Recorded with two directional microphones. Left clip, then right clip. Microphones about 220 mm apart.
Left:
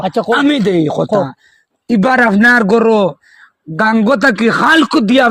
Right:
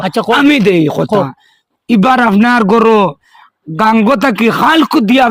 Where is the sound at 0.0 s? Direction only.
45° right (ahead or behind).